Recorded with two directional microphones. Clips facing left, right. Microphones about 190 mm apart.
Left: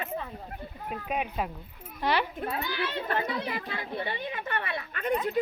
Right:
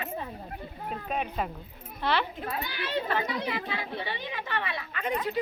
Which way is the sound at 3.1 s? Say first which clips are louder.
Even; 50° left (ahead or behind).